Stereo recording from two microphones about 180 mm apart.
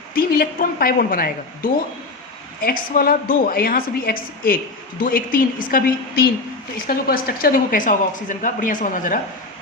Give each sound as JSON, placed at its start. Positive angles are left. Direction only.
{"t": 0.1, "sound": "speech", "side_deg": 55}